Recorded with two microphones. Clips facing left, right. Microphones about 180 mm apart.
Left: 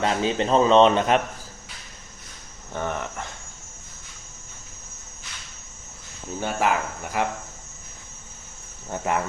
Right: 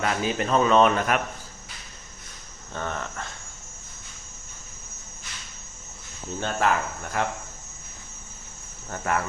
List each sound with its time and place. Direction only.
0.0 s speech: 25° left (ahead or behind)
2.7 s speech: 15° left (ahead or behind)
6.4 s speech: 10° left (ahead or behind)
8.9 s speech: 20° left (ahead or behind)